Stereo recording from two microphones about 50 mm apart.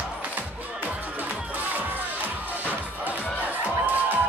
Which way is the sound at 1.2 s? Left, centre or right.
Right.